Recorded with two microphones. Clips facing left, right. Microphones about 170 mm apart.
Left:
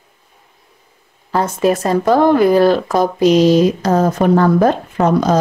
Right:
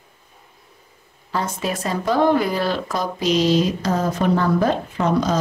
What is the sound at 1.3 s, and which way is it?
Speech, 50° left (ahead or behind).